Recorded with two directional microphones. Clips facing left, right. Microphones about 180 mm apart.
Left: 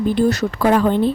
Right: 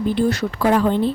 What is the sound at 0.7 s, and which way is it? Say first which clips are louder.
Speech: left 1 dB; 55° left (ahead or behind).